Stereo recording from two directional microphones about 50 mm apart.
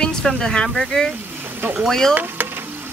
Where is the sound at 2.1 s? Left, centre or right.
Right.